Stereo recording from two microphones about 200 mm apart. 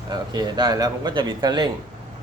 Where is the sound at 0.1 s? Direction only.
20° right (ahead or behind).